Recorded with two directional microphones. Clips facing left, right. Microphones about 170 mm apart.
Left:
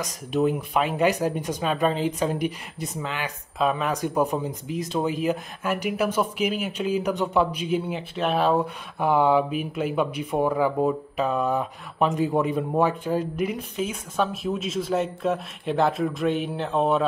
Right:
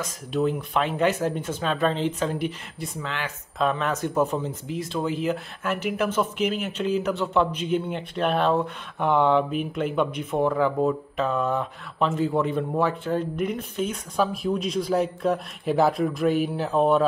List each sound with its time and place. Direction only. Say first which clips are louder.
0.0 s speech: left 1 dB; 20° left (ahead or behind); by 17.0 s centre (ahead or behind)